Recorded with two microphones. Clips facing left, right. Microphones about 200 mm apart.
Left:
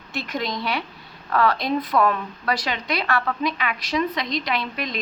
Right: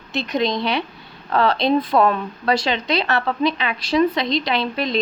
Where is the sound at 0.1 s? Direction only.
20° right (ahead or behind).